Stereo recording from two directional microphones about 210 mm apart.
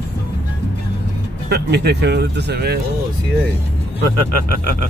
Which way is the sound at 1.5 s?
50° right (ahead or behind).